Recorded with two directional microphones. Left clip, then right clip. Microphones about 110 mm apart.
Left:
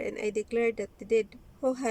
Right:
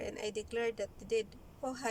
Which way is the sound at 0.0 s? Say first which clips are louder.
Left 8 dB; 40° left (ahead or behind).